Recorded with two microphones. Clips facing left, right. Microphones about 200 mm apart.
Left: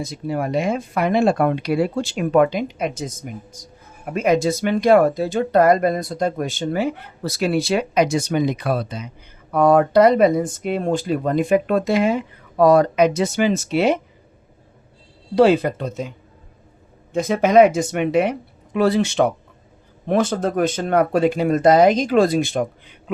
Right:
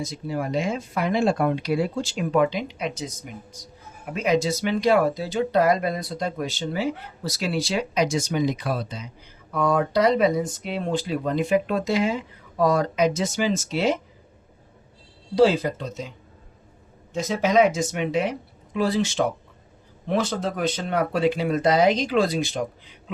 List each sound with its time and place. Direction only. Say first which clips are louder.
0.0 s speech: left 4 dB; 60° left (ahead or behind)
15.4 s speech: left 4 dB; 60° left (ahead or behind)